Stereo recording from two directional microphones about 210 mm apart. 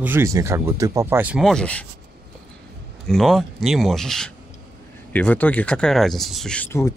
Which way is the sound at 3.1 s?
Centre (ahead or behind).